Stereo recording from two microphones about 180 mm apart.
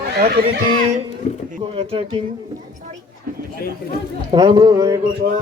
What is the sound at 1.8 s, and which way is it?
Speech, 30° right (ahead or behind).